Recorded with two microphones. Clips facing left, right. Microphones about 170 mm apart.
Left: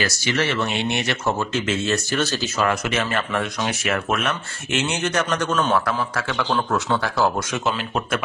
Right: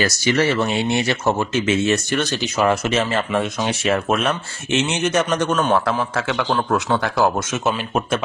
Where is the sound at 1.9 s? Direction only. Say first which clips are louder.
Right 3 dB; 5° right (ahead or behind).